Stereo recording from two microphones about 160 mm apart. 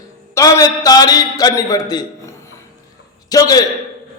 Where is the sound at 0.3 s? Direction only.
20° left (ahead or behind).